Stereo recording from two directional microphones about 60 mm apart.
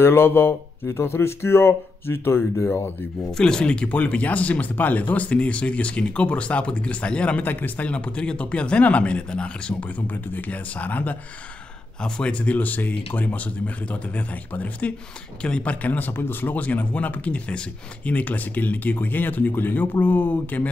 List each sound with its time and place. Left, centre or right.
0.0 s speech: left
3.3 s speech: centre; by 20.7 s left